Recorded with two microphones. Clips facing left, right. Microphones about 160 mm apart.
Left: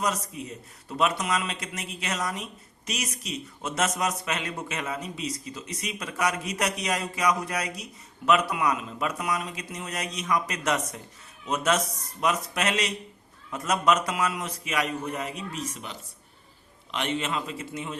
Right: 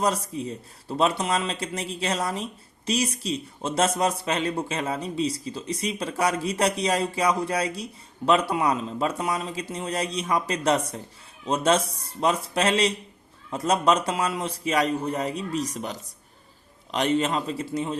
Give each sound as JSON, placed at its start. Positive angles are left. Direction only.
{"t": 0.0, "sound": "speech", "side_deg": -30}